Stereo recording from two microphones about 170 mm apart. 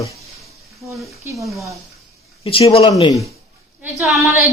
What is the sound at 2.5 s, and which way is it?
Speech, 35° left (ahead or behind).